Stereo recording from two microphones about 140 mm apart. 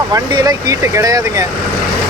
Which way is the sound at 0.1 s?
25° right (ahead or behind).